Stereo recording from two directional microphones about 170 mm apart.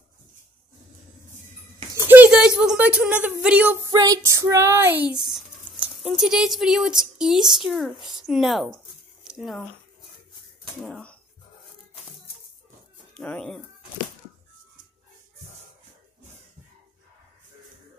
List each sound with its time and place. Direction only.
2.0 s speech: 10° right (ahead or behind)
3.9 s speech: 20° right (ahead or behind); by 8.7 s centre (ahead or behind)
9.2 s a sound: centre (ahead or behind)
10.8 s speech: 5° left (ahead or behind)
13.1 s speech: 5° left (ahead or behind)